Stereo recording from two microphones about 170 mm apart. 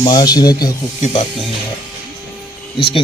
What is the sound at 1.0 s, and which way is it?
Speech, 35° left (ahead or behind).